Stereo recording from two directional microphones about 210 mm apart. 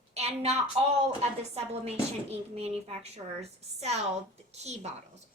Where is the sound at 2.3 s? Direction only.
30° right (ahead or behind).